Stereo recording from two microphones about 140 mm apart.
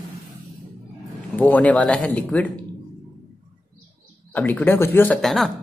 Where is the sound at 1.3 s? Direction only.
10° left (ahead or behind).